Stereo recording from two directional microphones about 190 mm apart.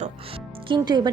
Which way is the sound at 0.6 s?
25° right (ahead or behind).